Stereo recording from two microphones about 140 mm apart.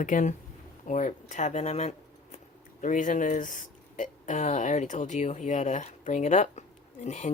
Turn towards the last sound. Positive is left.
turn(degrees=55)  # may be behind; listen again after turning